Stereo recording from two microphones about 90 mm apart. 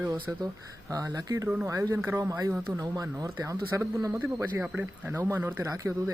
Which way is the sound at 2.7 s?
40° right (ahead or behind).